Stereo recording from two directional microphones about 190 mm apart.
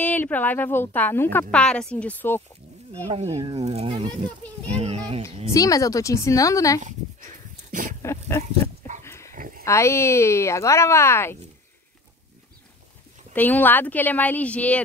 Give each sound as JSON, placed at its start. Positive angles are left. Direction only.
{"t": 0.0, "sound": "a woman's voice", "side_deg": 10}
{"t": 3.1, "sound": "speech", "side_deg": -35}
{"t": 5.2, "sound": "a woman's voice", "side_deg": 15}
{"t": 8.0, "sound": "a woman's voice", "side_deg": 15}
{"t": 9.0, "sound": "dog", "side_deg": 15}
{"t": 9.3, "sound": "dog", "side_deg": -45}
{"t": 9.7, "sound": "a woman's voice", "side_deg": 15}
{"t": 13.3, "sound": "a woman's voice", "side_deg": 10}